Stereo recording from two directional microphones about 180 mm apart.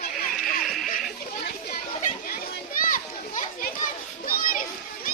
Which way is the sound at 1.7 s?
50° left (ahead or behind).